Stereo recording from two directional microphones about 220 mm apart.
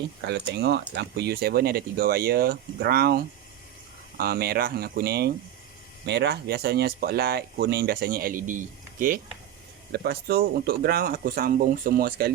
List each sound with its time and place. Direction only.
0.3 s speech: 50° right (ahead or behind)